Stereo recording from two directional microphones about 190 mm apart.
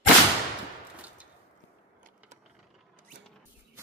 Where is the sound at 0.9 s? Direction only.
5° right (ahead or behind).